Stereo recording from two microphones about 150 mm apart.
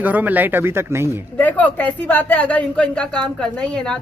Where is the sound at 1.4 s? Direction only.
10° left (ahead or behind).